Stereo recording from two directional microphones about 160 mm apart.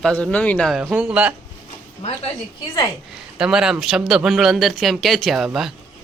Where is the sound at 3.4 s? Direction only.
5° right (ahead or behind).